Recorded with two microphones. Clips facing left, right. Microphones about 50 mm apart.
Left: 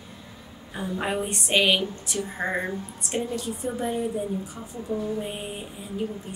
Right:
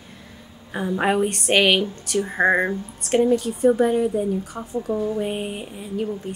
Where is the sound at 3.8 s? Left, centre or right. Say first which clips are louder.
Right 8 dB; right.